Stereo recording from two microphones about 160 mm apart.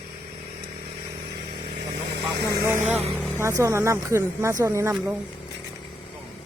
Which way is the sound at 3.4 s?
20° right (ahead or behind).